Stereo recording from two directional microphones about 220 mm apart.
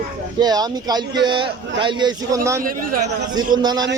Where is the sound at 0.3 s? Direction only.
20° right (ahead or behind).